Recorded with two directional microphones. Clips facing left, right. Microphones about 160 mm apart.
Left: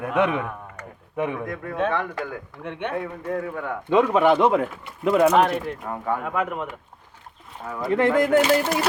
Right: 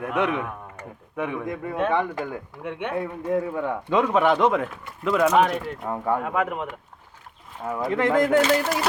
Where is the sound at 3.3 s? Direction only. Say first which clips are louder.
Right 4 dB; 20° right (ahead or behind).